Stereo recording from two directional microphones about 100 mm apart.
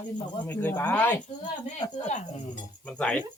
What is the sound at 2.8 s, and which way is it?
Speech, 10° left (ahead or behind).